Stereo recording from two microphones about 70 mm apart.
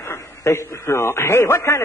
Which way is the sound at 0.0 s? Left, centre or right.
Left.